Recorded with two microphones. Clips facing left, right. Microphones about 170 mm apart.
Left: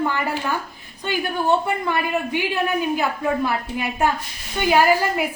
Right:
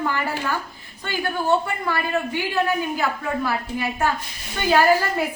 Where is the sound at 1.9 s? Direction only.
20° left (ahead or behind).